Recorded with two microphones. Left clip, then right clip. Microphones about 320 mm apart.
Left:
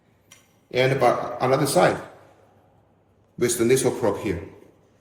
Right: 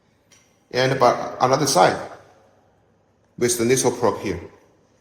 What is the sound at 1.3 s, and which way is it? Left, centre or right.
Speech, centre.